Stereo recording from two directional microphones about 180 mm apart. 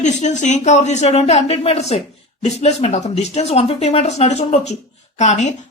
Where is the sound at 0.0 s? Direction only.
40° left (ahead or behind).